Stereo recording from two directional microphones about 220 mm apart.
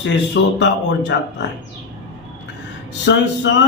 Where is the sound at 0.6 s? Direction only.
50° left (ahead or behind).